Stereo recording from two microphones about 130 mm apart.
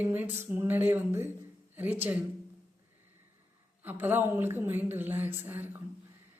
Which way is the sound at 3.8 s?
15° right (ahead or behind).